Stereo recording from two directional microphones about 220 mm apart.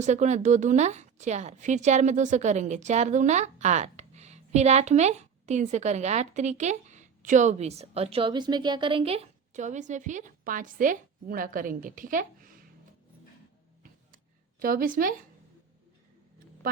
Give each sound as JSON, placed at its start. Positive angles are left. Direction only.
{"t": 0.0, "sound": "a woman's voice", "side_deg": -30}
{"t": 14.6, "sound": "a woman's voice", "side_deg": -40}